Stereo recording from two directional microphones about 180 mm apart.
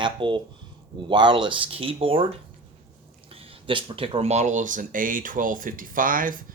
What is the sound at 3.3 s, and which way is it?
Speech, 30° right (ahead or behind).